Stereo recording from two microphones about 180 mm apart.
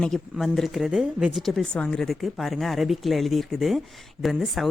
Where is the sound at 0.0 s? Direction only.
Centre (ahead or behind).